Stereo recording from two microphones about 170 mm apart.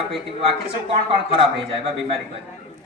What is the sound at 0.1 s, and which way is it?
A man's voice, 30° right (ahead or behind).